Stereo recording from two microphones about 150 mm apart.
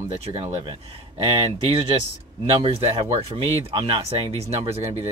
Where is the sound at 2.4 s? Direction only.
40° right (ahead or behind).